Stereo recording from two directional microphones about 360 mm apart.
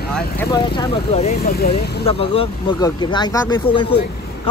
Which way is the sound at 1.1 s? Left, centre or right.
Left.